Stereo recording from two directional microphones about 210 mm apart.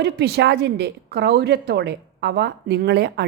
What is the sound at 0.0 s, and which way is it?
A woman's voice, 50° right (ahead or behind).